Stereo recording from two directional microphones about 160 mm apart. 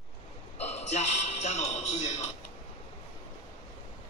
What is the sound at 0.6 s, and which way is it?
A man's voice, 45° left (ahead or behind).